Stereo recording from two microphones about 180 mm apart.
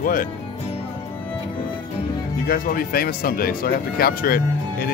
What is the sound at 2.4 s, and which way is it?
Speech, 50° left (ahead or behind).